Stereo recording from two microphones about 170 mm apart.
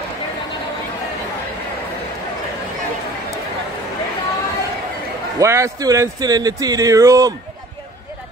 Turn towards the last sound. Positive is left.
turn(degrees=-20)  # may be behind; listen again after turning